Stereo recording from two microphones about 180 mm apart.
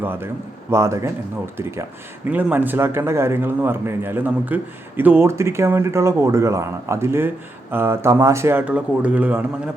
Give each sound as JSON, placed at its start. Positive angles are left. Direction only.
{"t": 0.0, "sound": "speech", "side_deg": -10}